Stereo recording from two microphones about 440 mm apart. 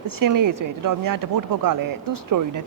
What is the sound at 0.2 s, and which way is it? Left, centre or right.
Speech, right.